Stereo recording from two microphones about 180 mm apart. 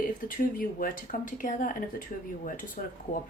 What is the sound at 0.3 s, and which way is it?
Speech, 50° left (ahead or behind).